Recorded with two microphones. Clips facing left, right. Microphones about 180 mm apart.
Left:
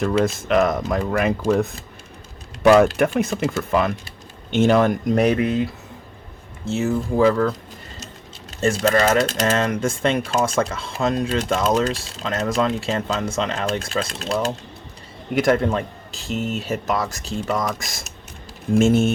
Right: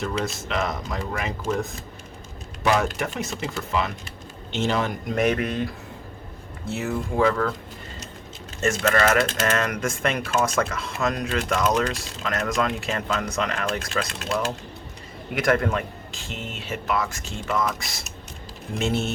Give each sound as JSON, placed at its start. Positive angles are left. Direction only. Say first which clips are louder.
{"t": 0.0, "sound": "speech", "louder": "left 8 dB", "side_deg": 50}
{"t": 3.0, "sound": "speech", "louder": "left 9 dB", "side_deg": 55}
{"t": 5.1, "sound": "speech", "louder": "left 2 dB", "side_deg": 35}
{"t": 6.7, "sound": "speech", "louder": "left 6 dB", "side_deg": 25}
{"t": 8.6, "sound": "speech", "louder": "left 3 dB", "side_deg": 30}